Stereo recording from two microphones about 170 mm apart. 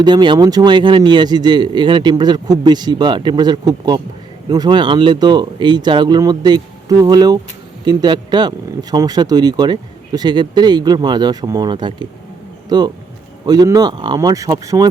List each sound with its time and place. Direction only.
0.0 s speech: 25° right (ahead or behind)